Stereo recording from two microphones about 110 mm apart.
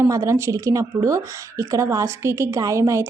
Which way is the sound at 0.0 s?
30° right (ahead or behind).